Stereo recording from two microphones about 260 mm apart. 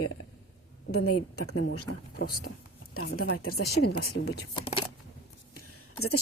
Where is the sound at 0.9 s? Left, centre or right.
Left.